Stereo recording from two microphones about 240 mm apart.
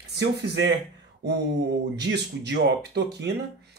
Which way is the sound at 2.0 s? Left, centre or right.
Right.